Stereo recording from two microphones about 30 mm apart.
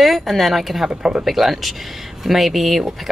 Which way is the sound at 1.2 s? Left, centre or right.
Centre.